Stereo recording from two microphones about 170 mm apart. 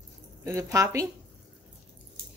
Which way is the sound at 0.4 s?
15° right (ahead or behind).